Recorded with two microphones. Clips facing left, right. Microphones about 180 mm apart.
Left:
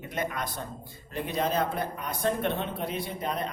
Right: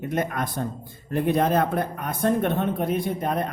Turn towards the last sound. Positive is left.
turn(degrees=-50)  # may be behind; listen again after turning